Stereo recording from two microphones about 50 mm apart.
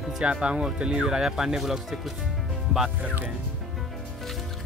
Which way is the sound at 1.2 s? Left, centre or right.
Centre.